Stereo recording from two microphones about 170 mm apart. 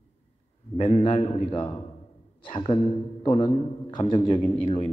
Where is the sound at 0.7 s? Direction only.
30° left (ahead or behind).